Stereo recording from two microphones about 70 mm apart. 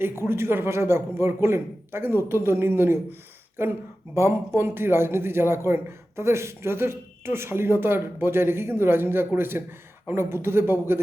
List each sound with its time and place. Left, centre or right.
0.0 s speech: right